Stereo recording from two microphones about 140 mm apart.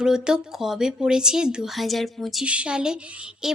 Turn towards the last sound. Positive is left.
turn(degrees=-5)  # may be behind; listen again after turning